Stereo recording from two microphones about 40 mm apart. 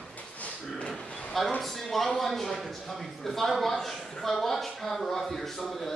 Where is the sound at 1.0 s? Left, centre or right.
Left.